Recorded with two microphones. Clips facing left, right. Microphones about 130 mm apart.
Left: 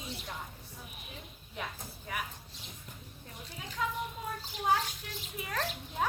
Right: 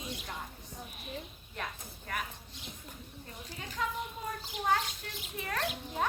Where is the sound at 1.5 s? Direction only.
5° left (ahead or behind).